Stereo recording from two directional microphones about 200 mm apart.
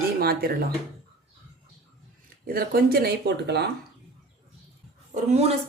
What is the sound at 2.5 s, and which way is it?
Speech, 50° right (ahead or behind).